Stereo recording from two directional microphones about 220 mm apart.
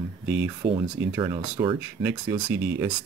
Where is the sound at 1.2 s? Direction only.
20° right (ahead or behind).